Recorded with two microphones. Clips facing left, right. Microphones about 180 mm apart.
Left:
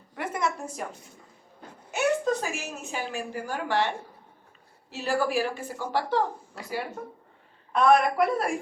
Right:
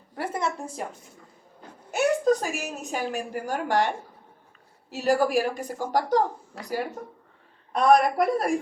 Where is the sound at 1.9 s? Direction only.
40° right (ahead or behind).